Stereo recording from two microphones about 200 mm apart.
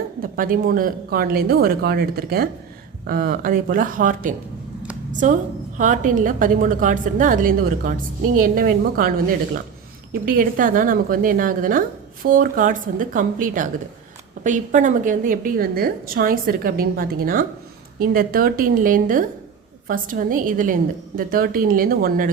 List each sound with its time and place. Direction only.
0.2 s a woman's voice: 45° right (ahead or behind)
10.2 s a woman's voice: 45° right (ahead or behind)